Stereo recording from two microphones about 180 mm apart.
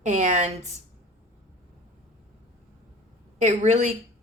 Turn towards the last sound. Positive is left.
turn(degrees=-40)  # may be behind; listen again after turning